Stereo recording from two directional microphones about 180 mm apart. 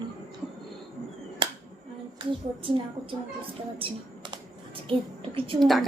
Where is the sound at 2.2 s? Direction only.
30° right (ahead or behind).